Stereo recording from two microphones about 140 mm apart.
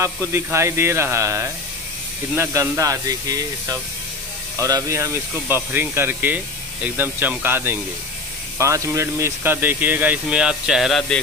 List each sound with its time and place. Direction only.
0.3 s speech: 20° right (ahead or behind)
4.6 s speech: 25° right (ahead or behind); by 11.1 s 5° left (ahead or behind)